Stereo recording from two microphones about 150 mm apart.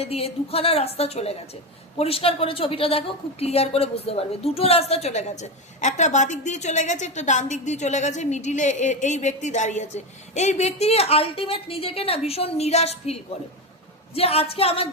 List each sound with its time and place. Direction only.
0.0 s a woman's voice: 40° left (ahead or behind)
14.2 s speech: 40° left (ahead or behind)